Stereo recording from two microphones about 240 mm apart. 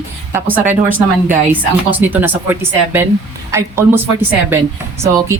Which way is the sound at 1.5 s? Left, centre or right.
Centre.